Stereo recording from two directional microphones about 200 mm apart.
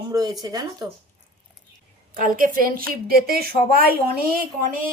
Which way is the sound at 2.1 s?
40° right (ahead or behind).